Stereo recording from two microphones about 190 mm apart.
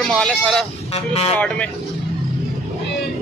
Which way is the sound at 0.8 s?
35° left (ahead or behind).